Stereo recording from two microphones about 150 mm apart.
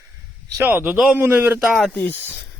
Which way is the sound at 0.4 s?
20° right (ahead or behind).